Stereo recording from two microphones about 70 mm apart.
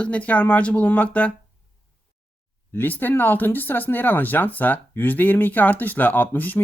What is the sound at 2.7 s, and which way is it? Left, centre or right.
Speech, left.